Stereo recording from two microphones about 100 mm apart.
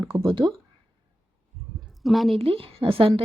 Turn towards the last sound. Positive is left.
turn(degrees=-65)  # may be behind; listen again after turning